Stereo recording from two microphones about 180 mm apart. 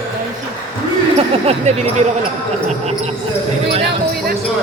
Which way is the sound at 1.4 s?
40° right (ahead or behind).